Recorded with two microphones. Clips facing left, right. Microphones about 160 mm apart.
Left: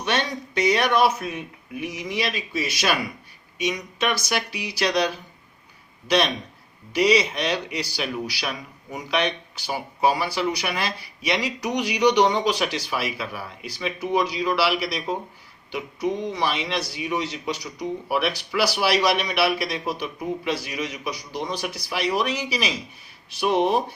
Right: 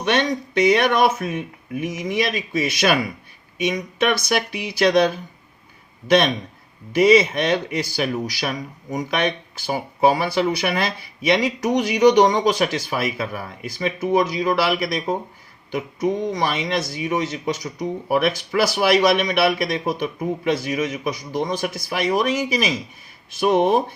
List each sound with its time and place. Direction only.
0.0 s speech: 55° right (ahead or behind)